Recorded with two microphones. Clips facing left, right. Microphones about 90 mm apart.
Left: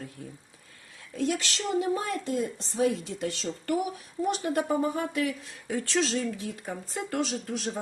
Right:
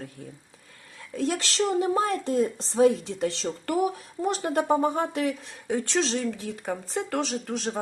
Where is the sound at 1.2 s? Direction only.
35° right (ahead or behind).